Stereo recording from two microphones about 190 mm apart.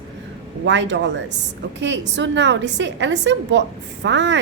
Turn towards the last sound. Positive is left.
turn(degrees=-70)  # may be behind; listen again after turning